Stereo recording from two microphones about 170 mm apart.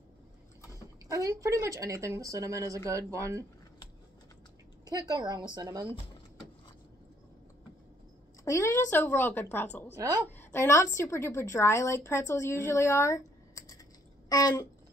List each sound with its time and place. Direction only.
1.1 s a woman's voice: 20° right (ahead or behind)
4.8 s a woman's voice: 25° right (ahead or behind)
8.5 s a woman's voice: 15° left (ahead or behind)
9.9 s a woman's voice: 20° right (ahead or behind)
10.3 s a woman's voice: 15° left (ahead or behind)
14.3 s a sound: 20° left (ahead or behind)